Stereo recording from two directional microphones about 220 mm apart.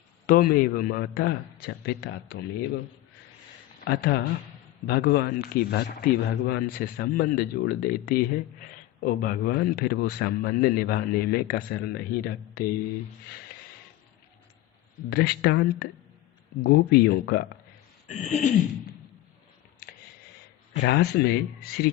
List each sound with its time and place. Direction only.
0.3 s a man's voice: 40° left (ahead or behind)
3.8 s a man's voice: 50° left (ahead or behind)
15.1 s a man's voice: 45° left (ahead or behind)
18.1 s throat clearing: 30° left (ahead or behind)
20.8 s a man's voice: 50° left (ahead or behind)